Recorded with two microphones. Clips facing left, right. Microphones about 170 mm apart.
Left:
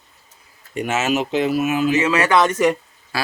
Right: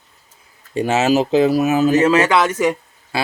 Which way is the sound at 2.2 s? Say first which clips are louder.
Even; 10° right (ahead or behind).